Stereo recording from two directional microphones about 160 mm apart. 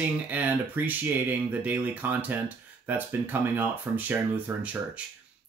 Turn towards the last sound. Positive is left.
turn(degrees=-10)  # may be behind; listen again after turning